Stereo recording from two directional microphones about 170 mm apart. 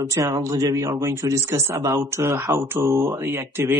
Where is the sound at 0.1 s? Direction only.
20° right (ahead or behind).